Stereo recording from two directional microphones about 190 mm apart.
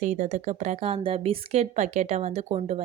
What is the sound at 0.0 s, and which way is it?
A woman's voice, 40° right (ahead or behind).